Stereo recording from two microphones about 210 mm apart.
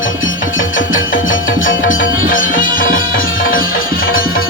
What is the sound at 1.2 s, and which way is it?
Music, 40° left (ahead or behind).